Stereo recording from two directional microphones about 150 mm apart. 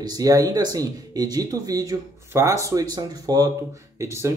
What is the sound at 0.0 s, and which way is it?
Speech, 25° right (ahead or behind).